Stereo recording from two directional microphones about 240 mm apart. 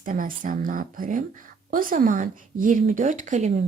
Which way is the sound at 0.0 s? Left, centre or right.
Right.